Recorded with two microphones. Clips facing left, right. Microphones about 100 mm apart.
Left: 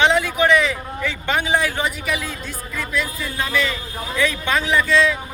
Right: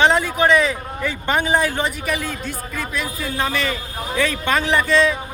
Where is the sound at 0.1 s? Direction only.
35° right (ahead or behind).